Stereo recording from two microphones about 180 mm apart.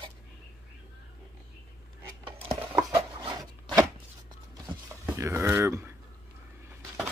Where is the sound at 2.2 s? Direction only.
30° right (ahead or behind).